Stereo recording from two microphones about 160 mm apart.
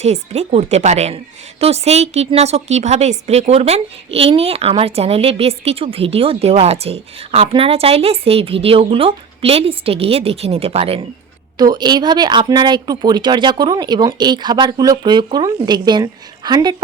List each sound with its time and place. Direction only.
0.0 s a woman's voice: 45° right (ahead or behind)
11.5 s speech: 25° right (ahead or behind)